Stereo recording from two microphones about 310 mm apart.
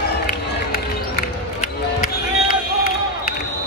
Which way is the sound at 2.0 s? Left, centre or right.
Left.